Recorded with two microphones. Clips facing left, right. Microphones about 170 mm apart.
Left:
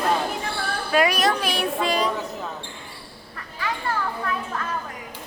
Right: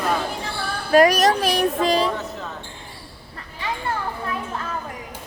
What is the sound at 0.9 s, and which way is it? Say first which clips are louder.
Speech: right 6 dB; 40° right (ahead or behind).